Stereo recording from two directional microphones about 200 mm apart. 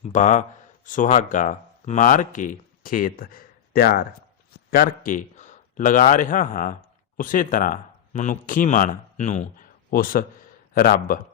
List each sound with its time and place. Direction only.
0.0 s a man's voice: 40° left (ahead or behind)